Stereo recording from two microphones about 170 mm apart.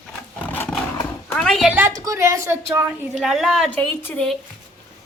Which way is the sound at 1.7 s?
10° right (ahead or behind).